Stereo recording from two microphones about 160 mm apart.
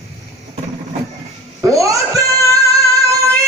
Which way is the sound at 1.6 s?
20° right (ahead or behind).